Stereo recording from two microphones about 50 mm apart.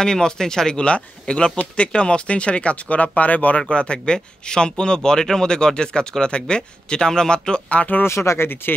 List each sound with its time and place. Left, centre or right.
0.0 s speech: centre
8.0 s speech: left